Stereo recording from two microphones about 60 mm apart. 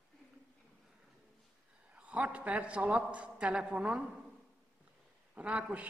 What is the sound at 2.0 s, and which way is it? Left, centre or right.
A man's voice, right.